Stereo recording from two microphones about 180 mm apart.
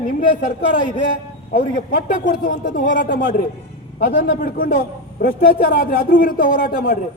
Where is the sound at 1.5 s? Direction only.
50° left (ahead or behind).